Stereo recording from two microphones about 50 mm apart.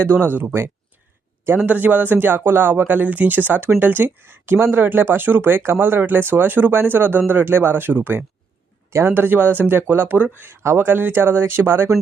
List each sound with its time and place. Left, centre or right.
0.0 s speech: right
1.6 s speech: right
8.9 s a man's voice: right
9.1 s speech: right